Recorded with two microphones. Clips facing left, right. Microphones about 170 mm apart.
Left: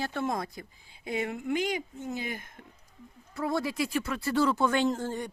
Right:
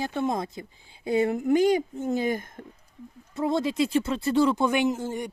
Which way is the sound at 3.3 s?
20° right (ahead or behind).